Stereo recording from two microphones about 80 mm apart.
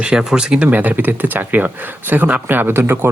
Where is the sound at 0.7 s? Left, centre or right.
Right.